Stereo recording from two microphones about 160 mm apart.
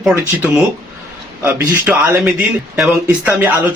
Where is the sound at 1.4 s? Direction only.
15° right (ahead or behind).